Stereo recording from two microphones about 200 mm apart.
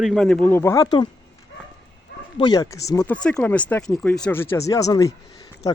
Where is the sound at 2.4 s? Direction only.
20° left (ahead or behind).